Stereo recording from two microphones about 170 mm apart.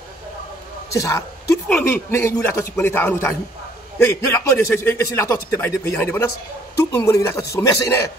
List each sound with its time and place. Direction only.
0.9 s a man's voice: 15° left (ahead or behind)